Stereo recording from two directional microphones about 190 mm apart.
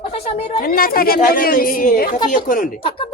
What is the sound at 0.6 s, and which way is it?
Speech, 50° left (ahead or behind).